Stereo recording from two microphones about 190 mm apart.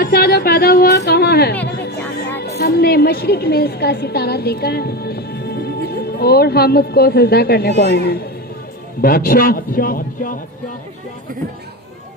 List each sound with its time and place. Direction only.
0.0 s a sound: 55° left (ahead or behind)
1.6 s music: 60° left (ahead or behind)
2.6 s a woman's voice: 55° left (ahead or behind)